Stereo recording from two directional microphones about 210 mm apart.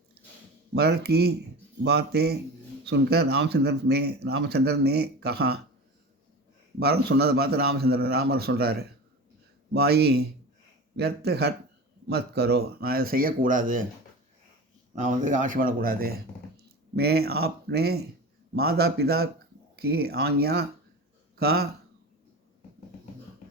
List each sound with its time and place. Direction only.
0.7 s speech: 50° right (ahead or behind)
6.7 s speech: 50° right (ahead or behind)
14.9 s speech: 35° right (ahead or behind)